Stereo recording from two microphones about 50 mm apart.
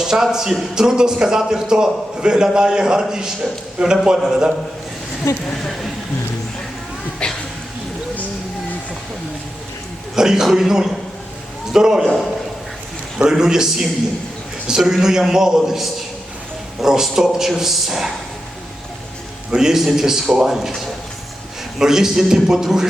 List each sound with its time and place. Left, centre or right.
0.0 s a man's voice: centre
7.2 s a sound: centre
10.2 s a man's voice: centre
13.3 s a man's voice: centre
19.5 s a man's voice: centre
21.8 s a man's voice: centre